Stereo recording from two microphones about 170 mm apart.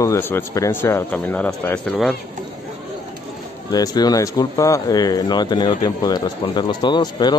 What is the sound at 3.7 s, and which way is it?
Speech, 25° left (ahead or behind).